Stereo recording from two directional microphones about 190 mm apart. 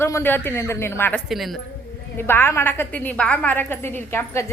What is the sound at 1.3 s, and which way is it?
Speech, centre (ahead or behind).